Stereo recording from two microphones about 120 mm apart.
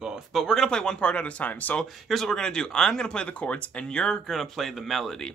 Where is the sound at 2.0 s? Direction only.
5° left (ahead or behind).